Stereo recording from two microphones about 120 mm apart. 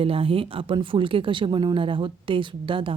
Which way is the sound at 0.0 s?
50° right (ahead or behind).